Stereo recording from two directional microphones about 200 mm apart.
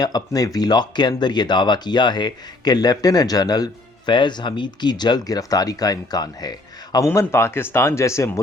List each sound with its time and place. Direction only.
0.0 s speech: 20° left (ahead or behind)